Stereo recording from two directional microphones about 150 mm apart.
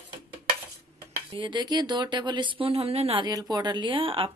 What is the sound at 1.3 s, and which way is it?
Speech, 30° right (ahead or behind).